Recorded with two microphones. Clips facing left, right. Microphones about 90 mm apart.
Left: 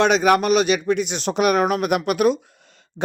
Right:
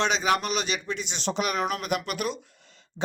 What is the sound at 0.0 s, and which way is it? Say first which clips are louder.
Speech: left 8 dB; 55° left (ahead or behind).